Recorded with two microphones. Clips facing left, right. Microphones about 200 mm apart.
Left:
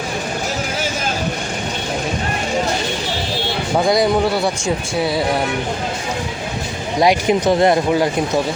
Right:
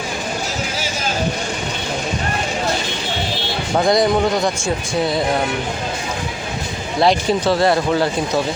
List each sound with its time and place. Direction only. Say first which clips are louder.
3.8 s speech: even; centre (ahead or behind)
7.0 s speech: left 1 dB; 15° left (ahead or behind)